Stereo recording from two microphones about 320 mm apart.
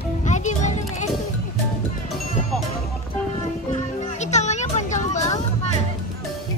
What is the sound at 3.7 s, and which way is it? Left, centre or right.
Music, left.